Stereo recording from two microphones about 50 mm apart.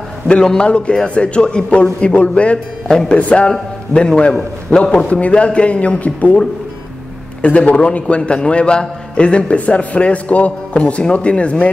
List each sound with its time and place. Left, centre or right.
0.3 s a man's voice: centre
2.9 s a man's voice: centre
3.2 s a man's voice: left
7.4 s a man's voice: left